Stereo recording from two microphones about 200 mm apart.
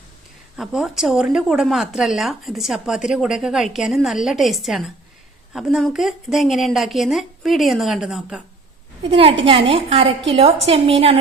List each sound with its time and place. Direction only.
0.5 s a woman's voice: 5° right (ahead or behind)
9.0 s a woman's voice: 30° right (ahead or behind)